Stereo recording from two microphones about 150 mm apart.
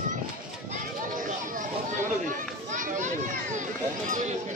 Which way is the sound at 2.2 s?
60° right (ahead or behind).